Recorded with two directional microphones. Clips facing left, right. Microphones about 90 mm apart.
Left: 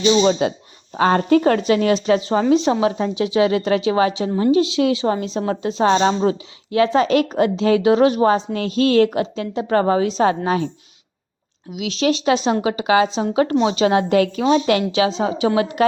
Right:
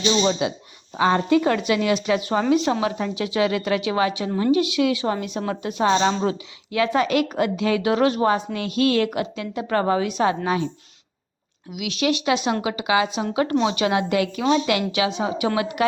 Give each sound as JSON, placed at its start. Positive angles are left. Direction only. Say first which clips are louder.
{"t": 0.3, "sound": "a woman's voice", "louder": "left 5 dB", "side_deg": 40}
{"t": 11.7, "sound": "a woman's voice", "louder": "left 3 dB", "side_deg": 30}